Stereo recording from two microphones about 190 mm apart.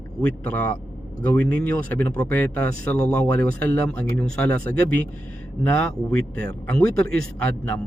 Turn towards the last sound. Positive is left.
turn(degrees=5)  # may be behind; listen again after turning